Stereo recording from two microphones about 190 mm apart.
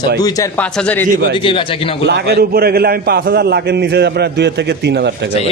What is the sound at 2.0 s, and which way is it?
A man's voice, 60° right (ahead or behind).